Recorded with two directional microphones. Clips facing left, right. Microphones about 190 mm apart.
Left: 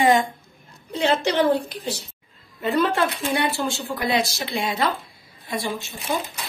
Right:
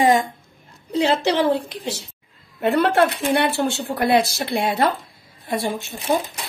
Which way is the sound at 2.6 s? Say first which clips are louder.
Right 4 dB; 65° right (ahead or behind).